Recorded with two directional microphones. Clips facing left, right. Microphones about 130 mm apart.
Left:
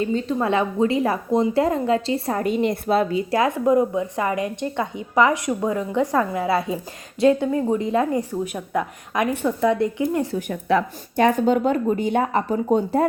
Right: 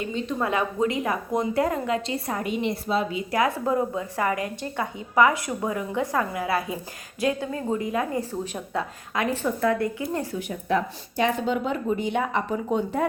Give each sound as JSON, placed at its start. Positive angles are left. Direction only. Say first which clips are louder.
{"t": 0.0, "sound": "a woman's voice", "louder": "left 5 dB", "side_deg": 35}
{"t": 3.2, "sound": "a woman's voice", "louder": "left 4 dB", "side_deg": 25}
{"t": 10.7, "sound": "speech", "louder": "left 4 dB", "side_deg": 75}
{"t": 11.2, "sound": "speech", "louder": "left 6 dB", "side_deg": 45}